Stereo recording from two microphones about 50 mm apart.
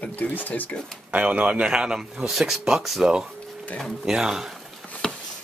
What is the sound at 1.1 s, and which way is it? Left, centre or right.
Speech, right.